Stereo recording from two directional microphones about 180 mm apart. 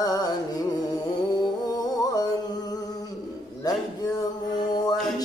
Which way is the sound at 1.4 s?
25° left (ahead or behind).